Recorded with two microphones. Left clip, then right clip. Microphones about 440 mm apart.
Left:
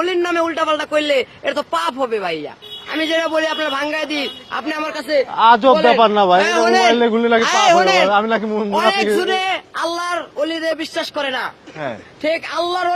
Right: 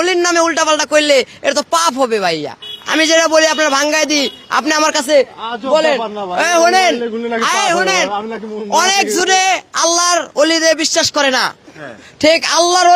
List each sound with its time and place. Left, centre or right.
0.0 s a man's voice: right
5.4 s a man's voice: left
5.7 s a man's voice: right
6.0 s a man's voice: left
6.4 s a man's voice: right
7.4 s speech: right
8.1 s a man's voice: centre
8.7 s a man's voice: right